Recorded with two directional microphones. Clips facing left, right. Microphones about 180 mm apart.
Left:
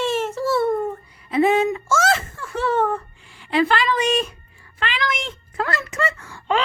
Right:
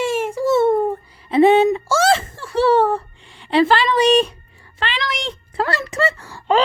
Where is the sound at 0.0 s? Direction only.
10° right (ahead or behind).